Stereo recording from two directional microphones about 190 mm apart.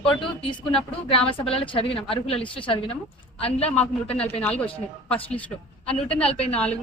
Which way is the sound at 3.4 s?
30° left (ahead or behind).